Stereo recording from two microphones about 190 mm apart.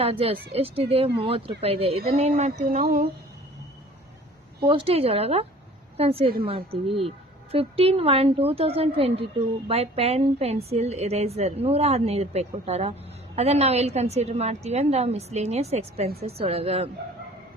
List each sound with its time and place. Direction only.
0.0 s a woman's voice: 30° right (ahead or behind)
4.6 s a woman's voice: 25° right (ahead or behind)
7.5 s a woman's voice: 30° right (ahead or behind)